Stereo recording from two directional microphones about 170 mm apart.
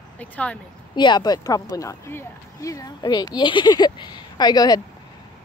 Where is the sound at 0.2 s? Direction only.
10° left (ahead or behind).